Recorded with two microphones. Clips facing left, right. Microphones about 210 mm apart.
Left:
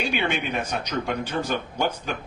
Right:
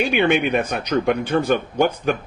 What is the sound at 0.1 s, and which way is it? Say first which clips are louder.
Speech: right 8 dB; 55° right (ahead or behind).